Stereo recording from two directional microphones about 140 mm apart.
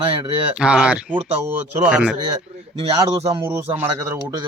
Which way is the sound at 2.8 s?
45° right (ahead or behind).